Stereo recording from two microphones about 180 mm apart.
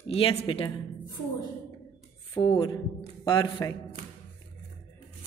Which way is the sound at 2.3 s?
30° left (ahead or behind).